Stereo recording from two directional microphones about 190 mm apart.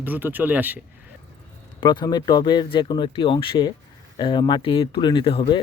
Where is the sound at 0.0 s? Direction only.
10° right (ahead or behind).